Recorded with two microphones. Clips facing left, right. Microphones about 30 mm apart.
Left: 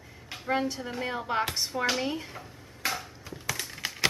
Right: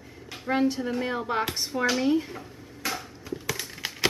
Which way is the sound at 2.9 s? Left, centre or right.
Centre.